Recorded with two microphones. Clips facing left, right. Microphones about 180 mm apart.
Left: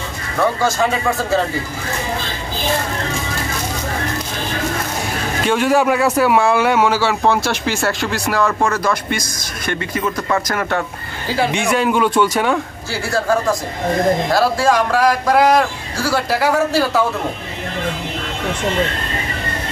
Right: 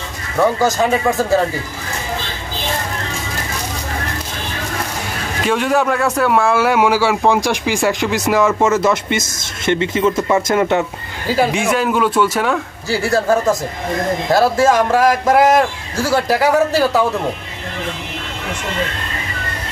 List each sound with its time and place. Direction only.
0.4 s speech: 20° right (ahead or behind)
5.4 s a man's voice: centre (ahead or behind); by 10.9 s 20° right (ahead or behind)
11.5 s a man's voice: centre (ahead or behind)
13.0 s speech: 20° right (ahead or behind)